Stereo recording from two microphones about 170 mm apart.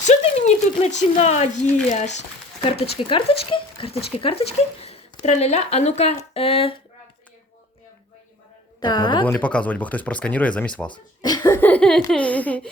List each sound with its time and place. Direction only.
0.0 s speech: 40° left (ahead or behind)
3.0 s speech: 30° left (ahead or behind)
8.8 s a woman's voice: 25° left (ahead or behind)
9.2 s speech: 5° left (ahead or behind)
10.9 s speech: 25° left (ahead or behind)